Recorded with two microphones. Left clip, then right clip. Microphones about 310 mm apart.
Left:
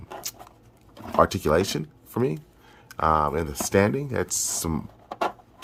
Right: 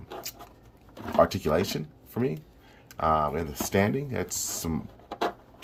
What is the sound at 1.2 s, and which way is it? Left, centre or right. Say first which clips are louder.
Speech: left 3 dB; centre.